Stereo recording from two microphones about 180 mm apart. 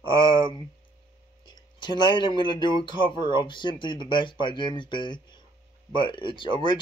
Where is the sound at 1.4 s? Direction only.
25° left (ahead or behind).